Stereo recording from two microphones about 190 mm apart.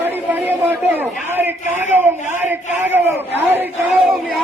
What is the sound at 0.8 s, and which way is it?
A man's voice, 10° right (ahead or behind).